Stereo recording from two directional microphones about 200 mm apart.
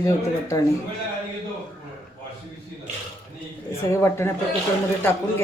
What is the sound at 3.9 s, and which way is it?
Speech, 15° left (ahead or behind).